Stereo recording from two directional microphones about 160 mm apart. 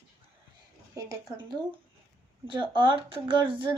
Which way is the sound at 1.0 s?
20° right (ahead or behind).